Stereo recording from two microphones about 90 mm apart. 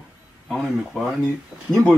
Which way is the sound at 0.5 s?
5° right (ahead or behind).